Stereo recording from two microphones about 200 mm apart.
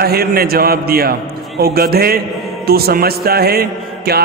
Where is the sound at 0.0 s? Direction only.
50° right (ahead or behind).